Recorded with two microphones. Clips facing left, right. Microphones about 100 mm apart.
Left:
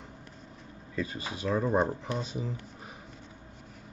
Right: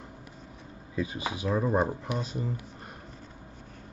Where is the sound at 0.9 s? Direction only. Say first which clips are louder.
Right 3 dB; 10° right (ahead or behind).